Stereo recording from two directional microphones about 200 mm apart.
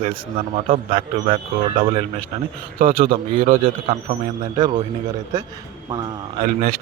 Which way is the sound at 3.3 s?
30° right (ahead or behind).